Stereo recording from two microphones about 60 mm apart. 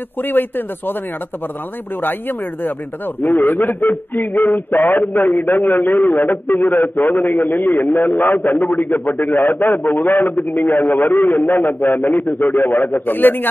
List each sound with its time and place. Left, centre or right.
0.2 s a man's voice: left
2.0 s a man's voice: left